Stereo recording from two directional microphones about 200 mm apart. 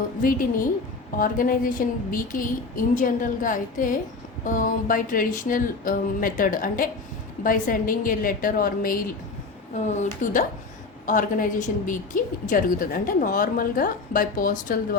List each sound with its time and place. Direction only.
0.2 s a woman's voice: 45° left (ahead or behind)